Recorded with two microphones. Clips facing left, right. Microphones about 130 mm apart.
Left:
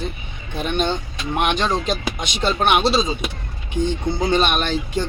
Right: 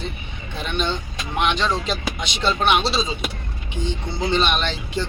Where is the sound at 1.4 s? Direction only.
50° left (ahead or behind).